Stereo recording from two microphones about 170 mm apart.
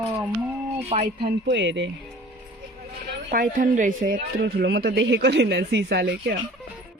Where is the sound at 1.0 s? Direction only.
75° right (ahead or behind).